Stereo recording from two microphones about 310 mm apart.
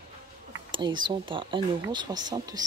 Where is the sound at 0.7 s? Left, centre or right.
Centre.